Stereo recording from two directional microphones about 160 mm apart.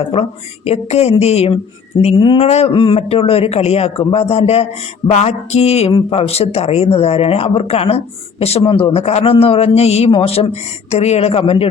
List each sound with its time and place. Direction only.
0.1 s a man's voice: 40° left (ahead or behind)